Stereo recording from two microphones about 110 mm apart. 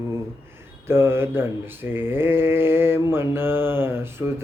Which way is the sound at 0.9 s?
20° right (ahead or behind).